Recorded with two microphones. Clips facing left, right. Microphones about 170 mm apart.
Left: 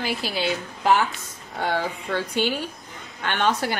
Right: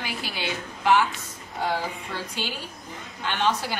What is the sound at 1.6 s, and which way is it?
Speech, 65° left (ahead or behind).